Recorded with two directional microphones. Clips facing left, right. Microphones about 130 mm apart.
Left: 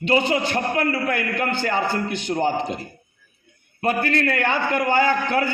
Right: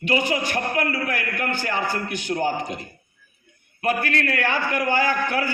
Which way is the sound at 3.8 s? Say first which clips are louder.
Left 2 dB; 30° left (ahead or behind).